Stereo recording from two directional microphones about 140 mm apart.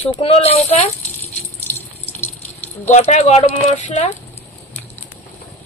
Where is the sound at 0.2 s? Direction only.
45° left (ahead or behind).